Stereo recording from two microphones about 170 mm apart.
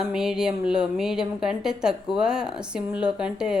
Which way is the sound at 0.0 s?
5° right (ahead or behind).